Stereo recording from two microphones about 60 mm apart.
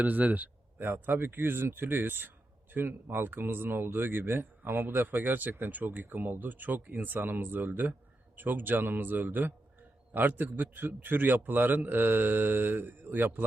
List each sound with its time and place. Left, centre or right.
0.0 s speech: right